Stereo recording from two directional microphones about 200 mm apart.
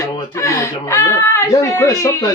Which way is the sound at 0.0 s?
15° left (ahead or behind).